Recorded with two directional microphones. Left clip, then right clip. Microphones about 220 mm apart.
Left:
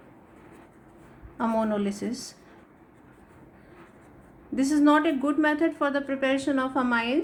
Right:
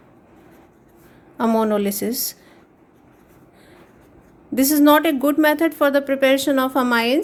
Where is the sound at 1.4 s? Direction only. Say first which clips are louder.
Right 8 dB; 40° right (ahead or behind).